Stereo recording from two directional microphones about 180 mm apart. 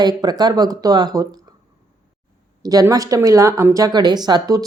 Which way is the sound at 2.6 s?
20° right (ahead or behind).